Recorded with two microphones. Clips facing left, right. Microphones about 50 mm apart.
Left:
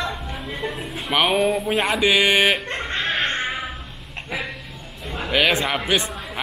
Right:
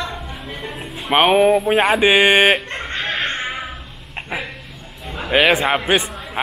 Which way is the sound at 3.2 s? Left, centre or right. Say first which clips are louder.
Even; centre.